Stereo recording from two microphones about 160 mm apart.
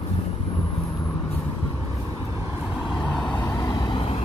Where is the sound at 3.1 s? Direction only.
10° left (ahead or behind).